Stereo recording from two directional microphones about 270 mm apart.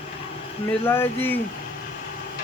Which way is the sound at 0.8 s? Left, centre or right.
Centre.